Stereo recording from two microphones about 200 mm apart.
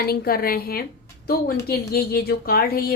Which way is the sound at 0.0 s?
50° left (ahead or behind).